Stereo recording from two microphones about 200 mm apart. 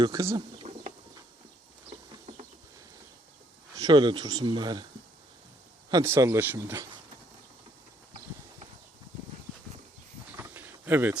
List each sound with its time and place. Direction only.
0.0 s speech: 15° right (ahead or behind)
0.7 s bird: 35° right (ahead or behind)
3.8 s speech: 20° right (ahead or behind)
5.9 s speech: 15° right (ahead or behind)
10.3 s a sound: 10° right (ahead or behind)